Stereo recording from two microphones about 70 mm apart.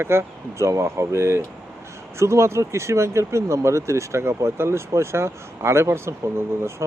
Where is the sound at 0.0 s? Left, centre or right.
Right.